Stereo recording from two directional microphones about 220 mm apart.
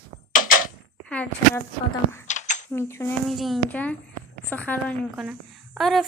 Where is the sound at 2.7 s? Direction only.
10° left (ahead or behind).